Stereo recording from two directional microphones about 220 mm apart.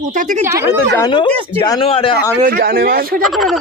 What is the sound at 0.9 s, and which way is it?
A man's voice, 20° left (ahead or behind).